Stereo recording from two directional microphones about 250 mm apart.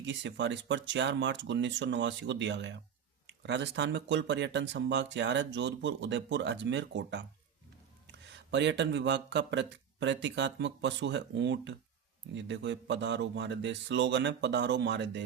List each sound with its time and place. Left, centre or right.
0.0 s speech: right